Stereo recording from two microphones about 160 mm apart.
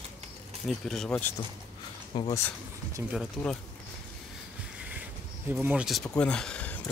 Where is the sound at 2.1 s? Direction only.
30° left (ahead or behind).